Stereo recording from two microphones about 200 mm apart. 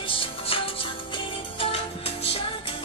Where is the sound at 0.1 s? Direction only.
25° left (ahead or behind).